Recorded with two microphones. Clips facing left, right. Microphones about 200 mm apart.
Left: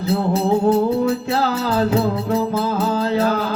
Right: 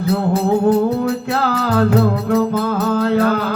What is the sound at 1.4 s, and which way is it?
Music, 60° right (ahead or behind).